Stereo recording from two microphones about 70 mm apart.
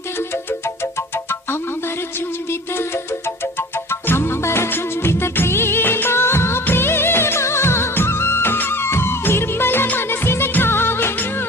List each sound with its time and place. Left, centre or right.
4.0 s music: left